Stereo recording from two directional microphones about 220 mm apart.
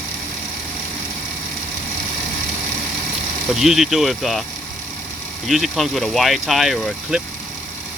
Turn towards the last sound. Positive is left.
turn(degrees=0)  # may be behind; listen again after turning